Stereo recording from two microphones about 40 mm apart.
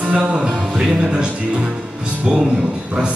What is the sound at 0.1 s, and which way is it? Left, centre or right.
Music, right.